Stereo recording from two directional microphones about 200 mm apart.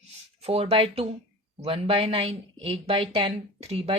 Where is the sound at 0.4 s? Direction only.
30° right (ahead or behind).